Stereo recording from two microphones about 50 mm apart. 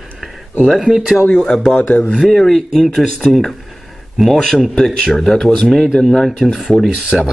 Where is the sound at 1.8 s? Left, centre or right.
Left.